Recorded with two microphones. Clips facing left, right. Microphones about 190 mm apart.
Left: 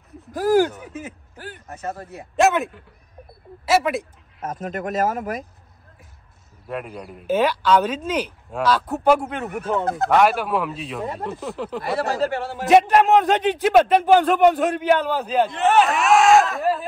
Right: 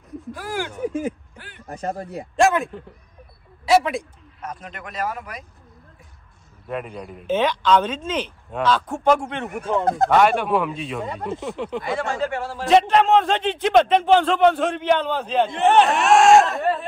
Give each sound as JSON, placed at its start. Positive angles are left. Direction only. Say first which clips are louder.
{"t": 0.3, "sound": "a man's voice", "louder": "left 12 dB", "side_deg": 40}
{"t": 1.7, "sound": "speech", "louder": "right 4 dB", "side_deg": -35}
{"t": 2.3, "sound": "speech", "louder": "even", "side_deg": 5}
{"t": 4.4, "sound": "speech", "louder": "left 7 dB", "side_deg": 45}
{"t": 6.7, "sound": "speech", "louder": "right 1 dB", "side_deg": 5}
{"t": 12.0, "sound": "speech", "louder": "left 4 dB", "side_deg": 35}
{"t": 12.6, "sound": "a man's voice", "louder": "left 1 dB", "side_deg": 5}